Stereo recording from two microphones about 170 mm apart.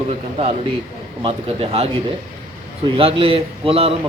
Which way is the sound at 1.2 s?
35° right (ahead or behind).